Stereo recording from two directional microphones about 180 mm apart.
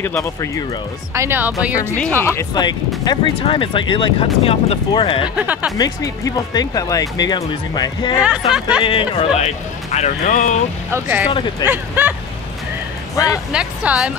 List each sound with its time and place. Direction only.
0.0 s speech: 15° left (ahead or behind)
1.1 s speech: 15° right (ahead or behind)
2.0 s speech: 10° left (ahead or behind); by 5.3 s 30° left (ahead or behind)
5.4 s speech: 10° right (ahead or behind)
5.8 s speech: 20° left (ahead or behind)
9.9 s speech: 45° left (ahead or behind)
10.9 s speech: 15° right (ahead or behind)
13.1 s speech: 20° left (ahead or behind)
13.5 s speech: 5° right (ahead or behind)